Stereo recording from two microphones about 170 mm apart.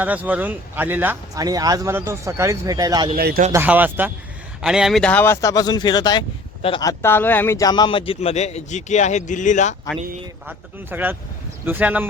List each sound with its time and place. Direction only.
0.0 s speech: 10° right (ahead or behind)
1.5 s speech: 20° right (ahead or behind)
3.2 s a man's voice: 65° right (ahead or behind)
3.5 s speech: 10° right (ahead or behind); by 6.8 s 30° left (ahead or behind)
6.8 s a man's voice: 15° left (ahead or behind); by 9.7 s 45° left (ahead or behind)
10.4 s speech: 10° right (ahead or behind)